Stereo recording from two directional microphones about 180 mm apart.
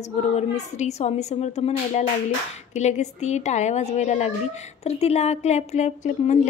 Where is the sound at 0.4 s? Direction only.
40° left (ahead or behind).